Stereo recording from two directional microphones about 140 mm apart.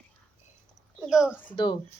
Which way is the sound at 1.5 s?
35° left (ahead or behind).